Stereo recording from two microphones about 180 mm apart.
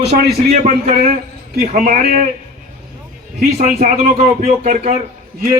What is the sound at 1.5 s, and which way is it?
Speech, 50° right (ahead or behind).